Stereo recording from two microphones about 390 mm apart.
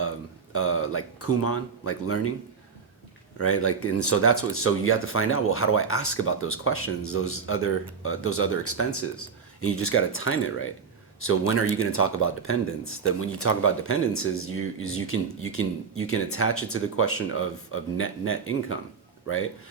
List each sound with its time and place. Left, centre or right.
0.5 s speech: left
3.3 s speech: left